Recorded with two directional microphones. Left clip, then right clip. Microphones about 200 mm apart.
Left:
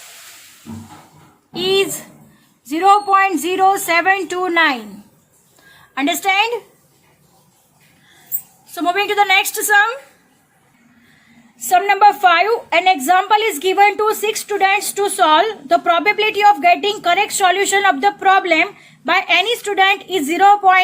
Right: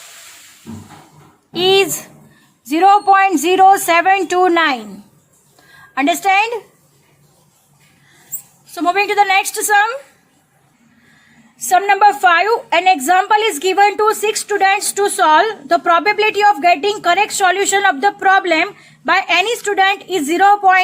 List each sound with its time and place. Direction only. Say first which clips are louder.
1.5 s a woman's voice: right 4 dB; 35° right (ahead or behind)
5.9 s a woman's voice: right 3 dB; 15° right (ahead or behind)
8.7 s a woman's voice: right 2 dB; 15° right (ahead or behind)
11.7 s a woman's voice: right 1 dB; 10° right (ahead or behind)